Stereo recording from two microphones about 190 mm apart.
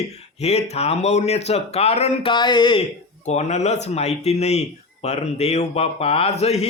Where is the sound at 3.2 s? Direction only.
35° left (ahead or behind).